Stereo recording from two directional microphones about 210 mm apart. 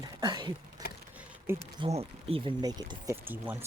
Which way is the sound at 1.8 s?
30° right (ahead or behind).